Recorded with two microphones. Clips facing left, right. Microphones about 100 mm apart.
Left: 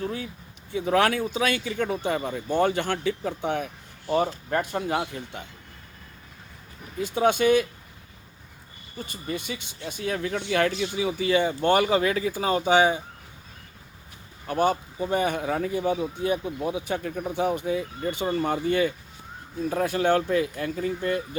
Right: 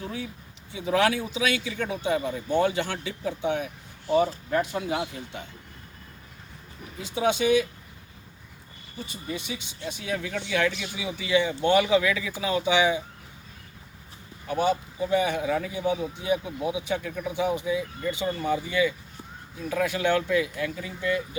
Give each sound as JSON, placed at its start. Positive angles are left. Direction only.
{"t": 0.7, "sound": "speech", "side_deg": 55}
{"t": 7.0, "sound": "speech", "side_deg": 50}
{"t": 9.0, "sound": "speech", "side_deg": 50}
{"t": 14.4, "sound": "speech", "side_deg": 50}
{"t": 19.7, "sound": "speech", "side_deg": 40}